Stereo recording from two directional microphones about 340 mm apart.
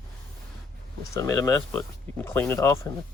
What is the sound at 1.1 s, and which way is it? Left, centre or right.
Speech, centre.